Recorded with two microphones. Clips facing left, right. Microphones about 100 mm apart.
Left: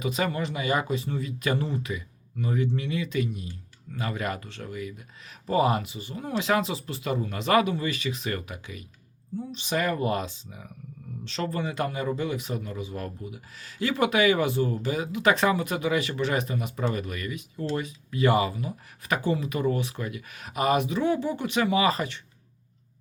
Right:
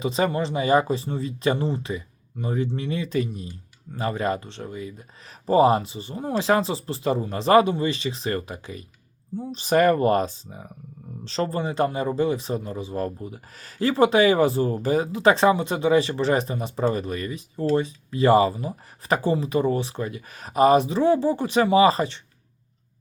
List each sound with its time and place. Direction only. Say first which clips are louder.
0.0 s a man's voice: right 5 dB; 30° right (ahead or behind)